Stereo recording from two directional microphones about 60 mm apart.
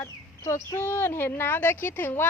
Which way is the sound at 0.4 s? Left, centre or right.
Left.